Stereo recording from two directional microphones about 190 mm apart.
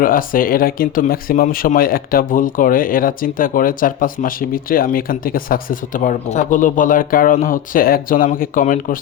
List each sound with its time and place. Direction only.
0.0 s speech: 45° left (ahead or behind)